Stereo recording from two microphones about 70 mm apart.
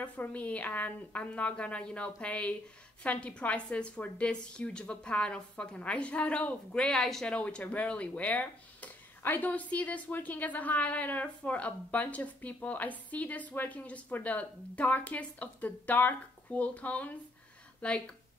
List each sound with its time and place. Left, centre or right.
0.0 s a woman's voice: left
7.3 s a woman's voice: centre